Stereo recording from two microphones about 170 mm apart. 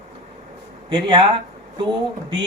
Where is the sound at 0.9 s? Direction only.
30° right (ahead or behind).